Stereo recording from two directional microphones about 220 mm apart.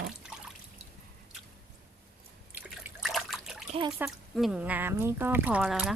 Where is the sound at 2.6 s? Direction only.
5° right (ahead or behind).